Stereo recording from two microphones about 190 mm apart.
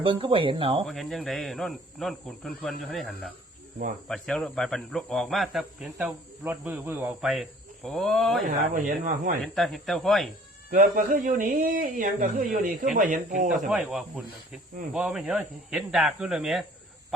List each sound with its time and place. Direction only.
0.0 s speech: 30° right (ahead or behind)
0.9 s speech: centre (ahead or behind)
8.4 s speech: 45° right (ahead or behind)
9.4 s speech: centre (ahead or behind)
10.7 s speech: 45° right (ahead or behind)
13.5 s speech: centre (ahead or behind)